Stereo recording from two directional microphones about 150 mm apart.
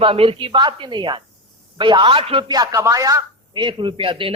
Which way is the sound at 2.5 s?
20° right (ahead or behind).